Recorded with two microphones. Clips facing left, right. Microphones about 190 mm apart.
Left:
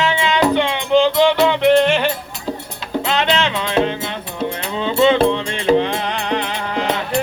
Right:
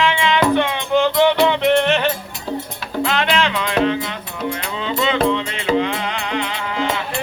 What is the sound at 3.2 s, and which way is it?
Music, 25° left (ahead or behind).